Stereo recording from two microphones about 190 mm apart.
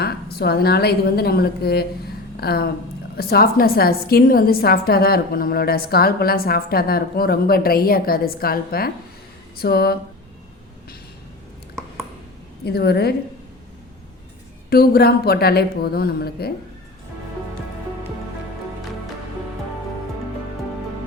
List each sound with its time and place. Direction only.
0.0 s a woman's voice: 55° left (ahead or behind)
12.6 s a woman's voice: 55° left (ahead or behind)
14.7 s a woman's voice: 55° left (ahead or behind)